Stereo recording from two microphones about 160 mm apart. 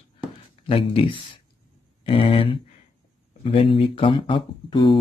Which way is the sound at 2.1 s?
35° left (ahead or behind).